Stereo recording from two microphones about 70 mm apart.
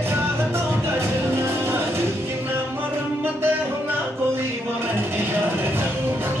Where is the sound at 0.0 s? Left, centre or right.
Right.